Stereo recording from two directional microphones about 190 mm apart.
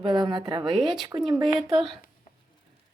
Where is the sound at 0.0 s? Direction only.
25° right (ahead or behind).